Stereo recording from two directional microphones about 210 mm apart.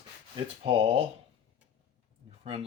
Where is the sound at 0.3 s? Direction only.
25° right (ahead or behind).